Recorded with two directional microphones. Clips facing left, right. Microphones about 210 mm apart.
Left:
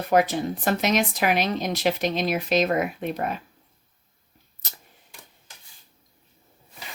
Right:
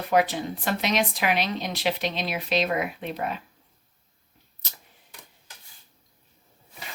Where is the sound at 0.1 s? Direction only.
45° left (ahead or behind).